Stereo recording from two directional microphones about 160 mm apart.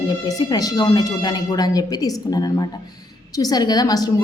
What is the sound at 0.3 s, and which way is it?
A woman's voice, 25° left (ahead or behind).